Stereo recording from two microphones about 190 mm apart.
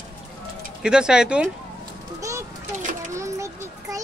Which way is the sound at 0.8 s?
5° right (ahead or behind).